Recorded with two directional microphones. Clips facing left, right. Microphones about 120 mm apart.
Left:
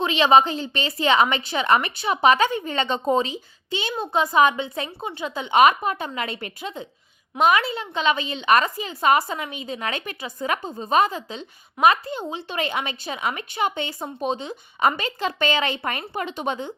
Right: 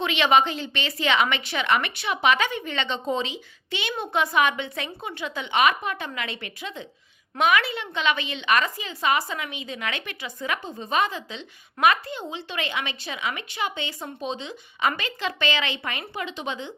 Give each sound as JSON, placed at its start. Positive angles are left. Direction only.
{"t": 0.0, "sound": "a woman's voice", "side_deg": 35}